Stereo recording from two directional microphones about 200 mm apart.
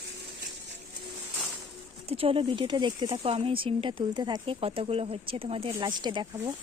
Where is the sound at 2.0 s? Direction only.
30° right (ahead or behind).